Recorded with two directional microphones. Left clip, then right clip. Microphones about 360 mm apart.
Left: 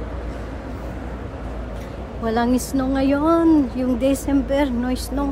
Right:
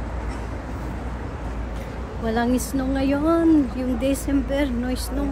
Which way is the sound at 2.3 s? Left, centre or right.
Centre.